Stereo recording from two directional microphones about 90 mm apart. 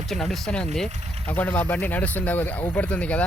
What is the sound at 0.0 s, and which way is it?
Speech, 5° left (ahead or behind).